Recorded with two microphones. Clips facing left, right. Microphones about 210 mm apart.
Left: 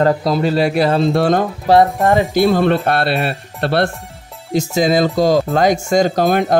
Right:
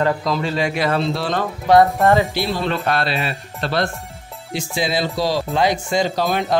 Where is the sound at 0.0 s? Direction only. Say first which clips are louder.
Left 5 dB; 40° left (ahead or behind).